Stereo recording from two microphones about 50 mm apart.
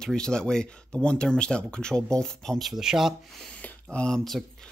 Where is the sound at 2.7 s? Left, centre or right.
Centre.